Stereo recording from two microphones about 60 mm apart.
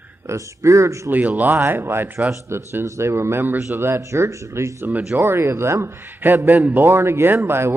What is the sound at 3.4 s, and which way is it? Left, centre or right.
Speech, right.